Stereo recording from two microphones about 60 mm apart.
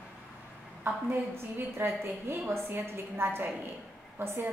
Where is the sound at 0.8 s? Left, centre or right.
Right.